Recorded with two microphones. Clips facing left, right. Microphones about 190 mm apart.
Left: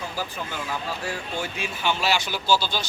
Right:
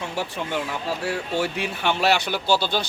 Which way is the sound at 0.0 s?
70° right (ahead or behind).